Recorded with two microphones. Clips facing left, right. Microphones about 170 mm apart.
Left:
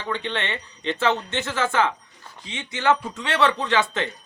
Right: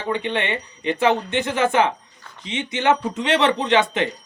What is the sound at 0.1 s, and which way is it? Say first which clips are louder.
A man's voice: right 5 dB; 15° right (ahead or behind).